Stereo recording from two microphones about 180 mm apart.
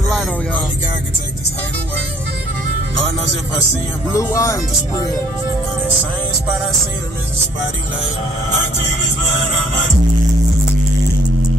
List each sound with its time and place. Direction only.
4.1 s speech: 15° left (ahead or behind)